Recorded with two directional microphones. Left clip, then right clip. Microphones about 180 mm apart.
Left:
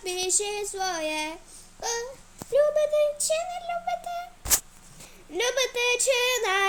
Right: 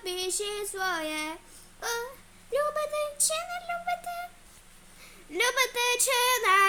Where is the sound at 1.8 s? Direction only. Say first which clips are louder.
Left 2 dB; 10° right (ahead or behind).